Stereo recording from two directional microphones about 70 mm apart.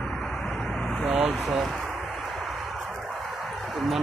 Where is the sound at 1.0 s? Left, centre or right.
Centre.